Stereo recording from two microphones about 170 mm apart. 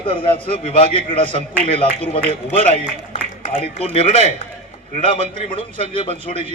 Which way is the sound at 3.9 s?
35° left (ahead or behind).